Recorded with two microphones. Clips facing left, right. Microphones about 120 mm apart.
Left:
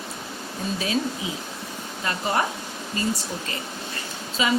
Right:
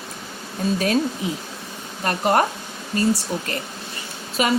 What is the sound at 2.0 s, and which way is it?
Speech, 60° right (ahead or behind).